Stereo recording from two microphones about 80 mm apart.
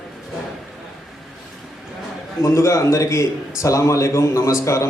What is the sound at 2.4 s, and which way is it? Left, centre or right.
A man's voice, left.